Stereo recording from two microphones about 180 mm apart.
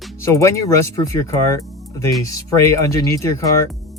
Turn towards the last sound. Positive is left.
turn(degrees=15)  # may be behind; listen again after turning